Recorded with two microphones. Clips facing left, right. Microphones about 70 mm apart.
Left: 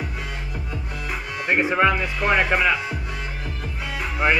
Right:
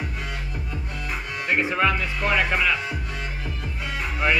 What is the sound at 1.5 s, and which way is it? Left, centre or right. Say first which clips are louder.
Speech: left 3 dB; left.